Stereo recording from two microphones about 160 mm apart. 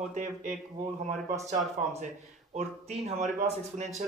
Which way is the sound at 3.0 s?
45° right (ahead or behind).